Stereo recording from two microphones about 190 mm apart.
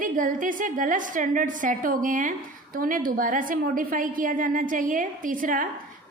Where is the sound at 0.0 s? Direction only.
45° right (ahead or behind).